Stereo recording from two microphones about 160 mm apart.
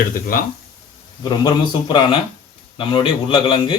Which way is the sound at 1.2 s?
25° left (ahead or behind).